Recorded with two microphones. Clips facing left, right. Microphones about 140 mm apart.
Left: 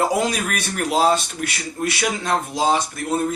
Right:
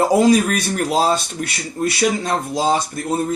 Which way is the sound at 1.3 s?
40° right (ahead or behind).